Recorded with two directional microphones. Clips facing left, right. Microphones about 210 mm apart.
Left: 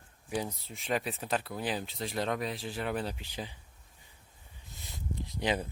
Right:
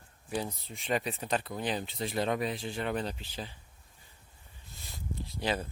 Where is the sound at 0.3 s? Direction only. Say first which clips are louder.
Even; 10° left (ahead or behind).